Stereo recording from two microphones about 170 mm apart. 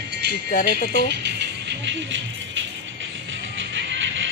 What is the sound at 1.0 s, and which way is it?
Music, 90° right.